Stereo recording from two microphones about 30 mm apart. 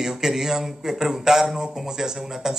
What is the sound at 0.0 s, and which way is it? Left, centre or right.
A man's voice, centre.